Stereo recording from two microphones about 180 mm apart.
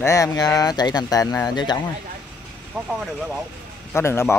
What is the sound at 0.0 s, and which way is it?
Speech, 20° left (ahead or behind).